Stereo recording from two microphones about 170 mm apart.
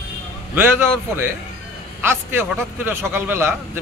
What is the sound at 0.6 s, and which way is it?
A man's voice, 15° right (ahead or behind).